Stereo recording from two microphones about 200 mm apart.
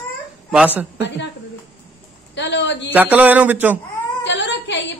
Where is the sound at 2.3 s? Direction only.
60° left (ahead or behind).